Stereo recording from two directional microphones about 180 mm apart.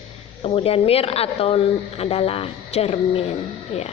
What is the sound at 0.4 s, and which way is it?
A woman's voice, 30° left (ahead or behind).